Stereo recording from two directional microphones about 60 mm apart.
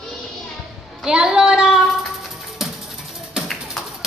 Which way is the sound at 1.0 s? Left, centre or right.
Centre.